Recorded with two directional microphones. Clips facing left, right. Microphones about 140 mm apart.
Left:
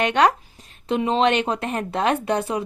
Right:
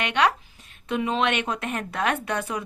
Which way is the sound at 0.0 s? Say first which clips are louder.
Left 5 dB; 45° left (ahead or behind).